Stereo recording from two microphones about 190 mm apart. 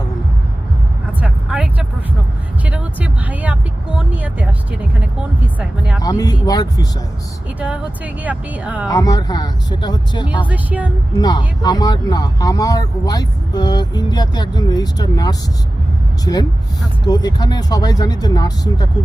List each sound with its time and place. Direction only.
1.2 s vehicle: 5° right (ahead or behind)
5.5 s speech: 5° right (ahead or behind)
6.0 s speech: 20° left (ahead or behind)
7.6 s speech: 5° right (ahead or behind)
8.9 s speech: 20° left (ahead or behind)
10.4 s speech: 10° right (ahead or behind)
11.2 s speech: 20° left (ahead or behind)